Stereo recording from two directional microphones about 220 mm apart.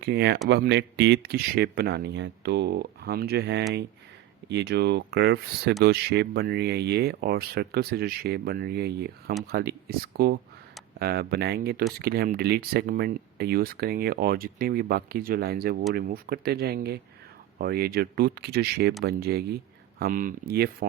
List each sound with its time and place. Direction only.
0.0 s speech: 45° right (ahead or behind)